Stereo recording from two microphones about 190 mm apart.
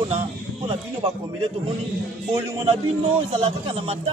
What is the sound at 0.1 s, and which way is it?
Speech, 30° right (ahead or behind).